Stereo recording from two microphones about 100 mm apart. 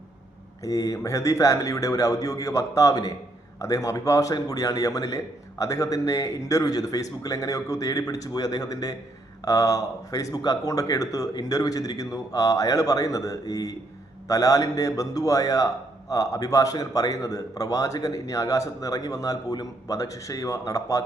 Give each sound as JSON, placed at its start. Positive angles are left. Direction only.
{"t": 0.6, "sound": "a man's voice", "side_deg": 35}